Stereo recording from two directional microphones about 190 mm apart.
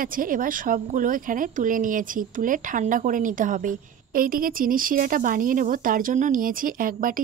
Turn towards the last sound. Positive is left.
turn(degrees=-45)  # may be behind; listen again after turning